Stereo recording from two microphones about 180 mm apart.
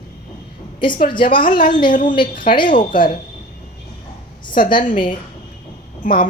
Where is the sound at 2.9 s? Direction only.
50° left (ahead or behind).